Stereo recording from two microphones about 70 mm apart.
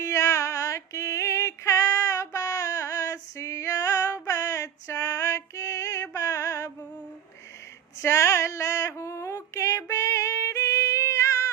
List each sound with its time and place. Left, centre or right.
0.0 s female singing: left
3.8 s female singing: left
8.0 s female singing: left